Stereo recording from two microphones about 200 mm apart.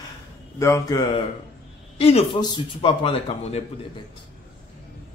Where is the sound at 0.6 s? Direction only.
15° left (ahead or behind).